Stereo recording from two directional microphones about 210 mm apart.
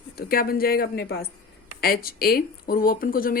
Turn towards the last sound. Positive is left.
turn(degrees=45)  # may be behind; listen again after turning